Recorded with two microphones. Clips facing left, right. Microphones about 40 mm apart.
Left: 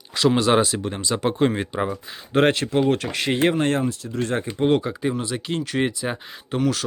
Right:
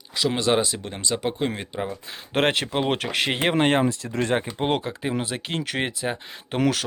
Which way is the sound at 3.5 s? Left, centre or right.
Right.